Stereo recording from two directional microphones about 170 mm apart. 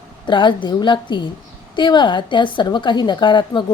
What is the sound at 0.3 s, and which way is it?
A woman's voice, 30° left (ahead or behind).